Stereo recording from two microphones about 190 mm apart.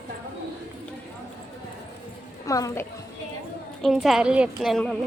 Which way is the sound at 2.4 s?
15° left (ahead or behind).